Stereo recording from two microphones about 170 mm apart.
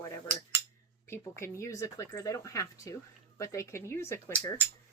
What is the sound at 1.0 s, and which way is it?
Speech, 15° left (ahead or behind).